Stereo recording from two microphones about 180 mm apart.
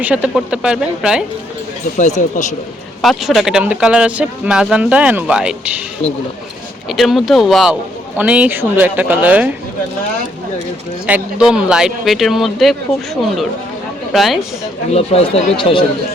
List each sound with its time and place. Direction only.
0.0 s speech: 5° right (ahead or behind)
2.0 s speech: 40° left (ahead or behind)
3.0 s speech: centre (ahead or behind)
6.8 s a man's voice: centre (ahead or behind)
11.0 s speech: 5° right (ahead or behind)
14.9 s speech: 35° left (ahead or behind)